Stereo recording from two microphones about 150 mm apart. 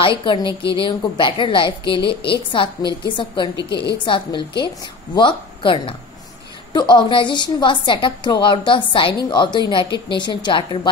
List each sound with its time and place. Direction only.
0.0 s a woman's voice: 35° left (ahead or behind)
4.0 s a woman's voice: 35° left (ahead or behind)